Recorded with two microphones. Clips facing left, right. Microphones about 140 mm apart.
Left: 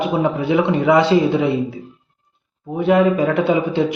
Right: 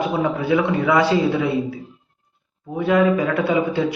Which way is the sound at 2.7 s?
20° left (ahead or behind).